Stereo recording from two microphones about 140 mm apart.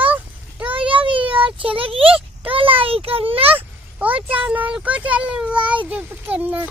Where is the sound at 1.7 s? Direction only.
40° right (ahead or behind).